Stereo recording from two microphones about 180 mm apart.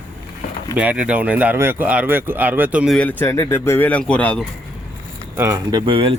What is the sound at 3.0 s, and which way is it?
Speech, 10° left (ahead or behind).